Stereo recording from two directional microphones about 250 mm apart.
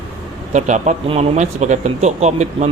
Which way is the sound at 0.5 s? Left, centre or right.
Right.